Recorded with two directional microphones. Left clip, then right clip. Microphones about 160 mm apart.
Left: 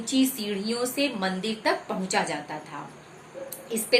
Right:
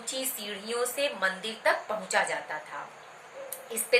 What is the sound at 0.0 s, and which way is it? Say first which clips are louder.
A woman's voice: left 8 dB; 15° left (ahead or behind).